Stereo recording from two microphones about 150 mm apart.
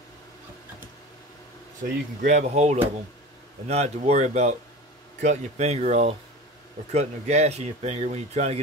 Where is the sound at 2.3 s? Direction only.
50° right (ahead or behind).